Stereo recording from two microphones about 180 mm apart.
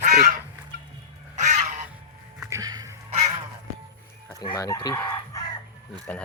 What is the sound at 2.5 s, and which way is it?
Music, 20° right (ahead or behind).